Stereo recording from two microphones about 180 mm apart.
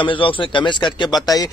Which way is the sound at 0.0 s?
30° left (ahead or behind).